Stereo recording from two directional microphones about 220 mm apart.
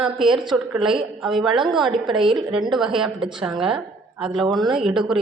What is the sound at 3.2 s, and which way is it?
Speech, 20° right (ahead or behind).